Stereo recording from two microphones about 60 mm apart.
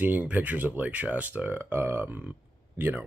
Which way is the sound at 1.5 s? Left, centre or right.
Right.